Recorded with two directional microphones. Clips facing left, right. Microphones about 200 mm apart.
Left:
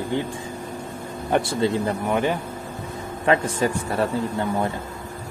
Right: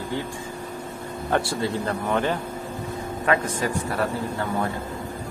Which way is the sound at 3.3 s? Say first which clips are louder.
Left 3 dB; 25° left (ahead or behind).